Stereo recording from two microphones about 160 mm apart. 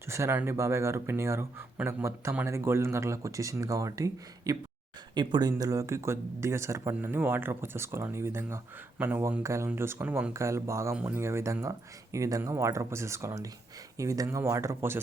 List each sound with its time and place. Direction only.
0.1 s speech: 15° right (ahead or behind)